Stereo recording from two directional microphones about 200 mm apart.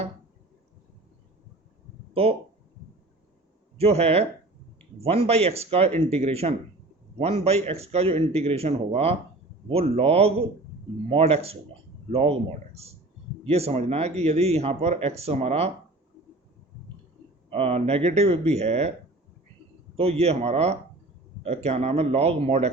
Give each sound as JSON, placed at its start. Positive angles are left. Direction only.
{"t": 3.8, "sound": "speech", "side_deg": -30}
{"t": 17.5, "sound": "speech", "side_deg": -30}
{"t": 20.0, "sound": "speech", "side_deg": -30}